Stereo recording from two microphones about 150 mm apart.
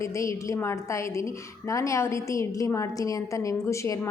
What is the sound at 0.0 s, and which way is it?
A woman's voice, 20° left (ahead or behind).